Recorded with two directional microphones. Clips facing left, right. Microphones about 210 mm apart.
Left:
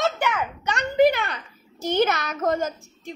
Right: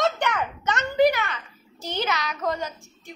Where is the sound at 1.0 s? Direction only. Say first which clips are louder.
Left 2 dB; 25° left (ahead or behind).